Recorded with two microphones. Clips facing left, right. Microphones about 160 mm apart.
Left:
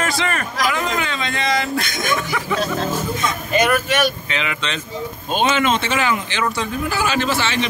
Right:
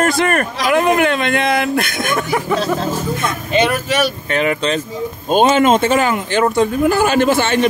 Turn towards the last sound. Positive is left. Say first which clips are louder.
# right 7 dB
turn(degrees=-50)  # may be behind; listen again after turning